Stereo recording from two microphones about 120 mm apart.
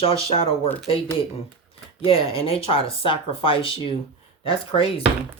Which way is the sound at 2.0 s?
50° left (ahead or behind).